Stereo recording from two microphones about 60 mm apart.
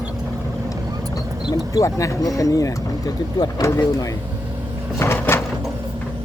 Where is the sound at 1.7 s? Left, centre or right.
Left.